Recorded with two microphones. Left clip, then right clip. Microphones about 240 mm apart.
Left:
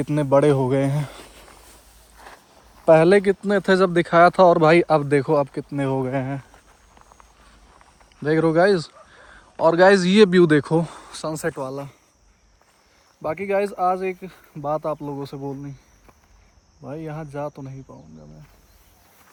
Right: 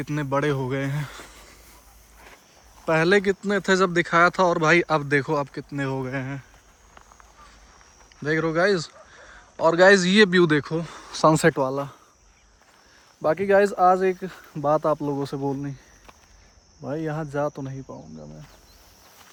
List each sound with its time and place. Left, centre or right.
0.0 s speech: centre
2.8 s speech: centre
8.2 s speech: centre
11.3 s speech: right
13.2 s speech: centre
15.3 s speech: right
16.9 s speech: centre